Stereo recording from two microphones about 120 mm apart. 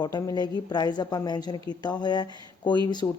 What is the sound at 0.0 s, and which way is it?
Speech, 30° left (ahead or behind).